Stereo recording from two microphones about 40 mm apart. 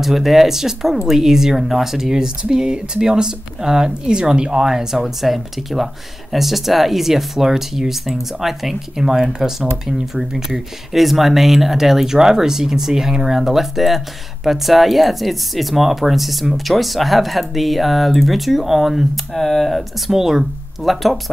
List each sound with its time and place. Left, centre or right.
0.0 s speech: centre
4.9 s speech: centre
19.3 s speech: centre
20.1 s speech: centre